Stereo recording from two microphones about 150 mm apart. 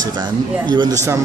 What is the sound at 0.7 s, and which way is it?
Speech, 25° right (ahead or behind).